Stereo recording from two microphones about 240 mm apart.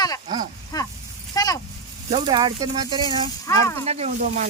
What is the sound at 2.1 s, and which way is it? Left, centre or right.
Speech, centre.